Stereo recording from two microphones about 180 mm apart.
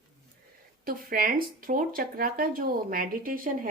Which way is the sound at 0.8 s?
50° right (ahead or behind).